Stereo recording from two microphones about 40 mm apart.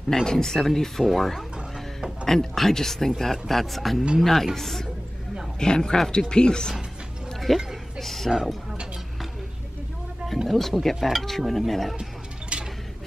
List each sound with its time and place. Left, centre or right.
0.1 s speech: centre
7.3 s a sound: centre
8.3 s speech: centre
10.5 s speech: centre